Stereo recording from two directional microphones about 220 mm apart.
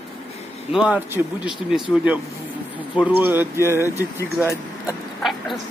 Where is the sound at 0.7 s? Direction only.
5° right (ahead or behind).